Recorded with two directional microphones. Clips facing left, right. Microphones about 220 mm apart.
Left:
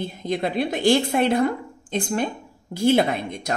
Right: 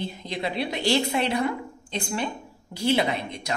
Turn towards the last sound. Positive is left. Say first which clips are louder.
# left 4 dB
turn(degrees=50)  # may be behind; listen again after turning